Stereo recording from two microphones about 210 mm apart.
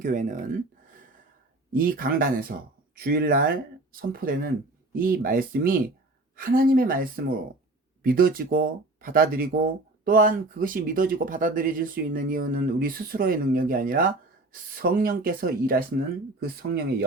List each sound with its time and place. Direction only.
0.0 s speech: 35° right (ahead or behind)